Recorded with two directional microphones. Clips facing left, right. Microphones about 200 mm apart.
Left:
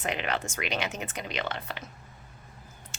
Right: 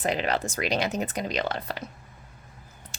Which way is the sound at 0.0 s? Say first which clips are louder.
Right 5 dB; 35° right (ahead or behind).